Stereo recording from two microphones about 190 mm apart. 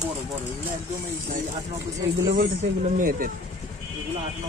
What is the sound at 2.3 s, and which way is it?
Speech, 45° right (ahead or behind).